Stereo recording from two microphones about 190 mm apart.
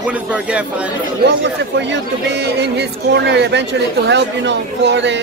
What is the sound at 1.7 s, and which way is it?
Speech, 65° right (ahead or behind).